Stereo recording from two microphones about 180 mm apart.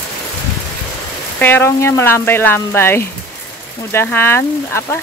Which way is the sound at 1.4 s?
10° left (ahead or behind).